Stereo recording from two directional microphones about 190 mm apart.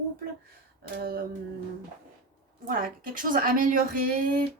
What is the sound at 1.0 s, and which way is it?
Speech, 50° right (ahead or behind).